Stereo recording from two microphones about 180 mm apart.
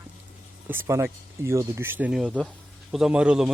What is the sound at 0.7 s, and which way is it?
A man's voice, 15° right (ahead or behind).